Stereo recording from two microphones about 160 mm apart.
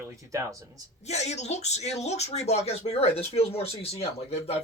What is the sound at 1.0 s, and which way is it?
Speech, 45° left (ahead or behind).